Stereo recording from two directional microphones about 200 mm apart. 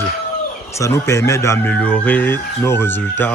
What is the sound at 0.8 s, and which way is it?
Speech, 15° left (ahead or behind).